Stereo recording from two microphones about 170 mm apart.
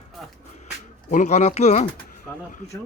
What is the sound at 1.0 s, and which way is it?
Speech, 45° left (ahead or behind).